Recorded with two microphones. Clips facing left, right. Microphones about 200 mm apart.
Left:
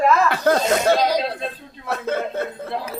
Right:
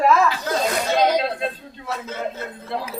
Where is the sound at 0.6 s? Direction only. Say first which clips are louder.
Left 3 dB; 25° left (ahead or behind).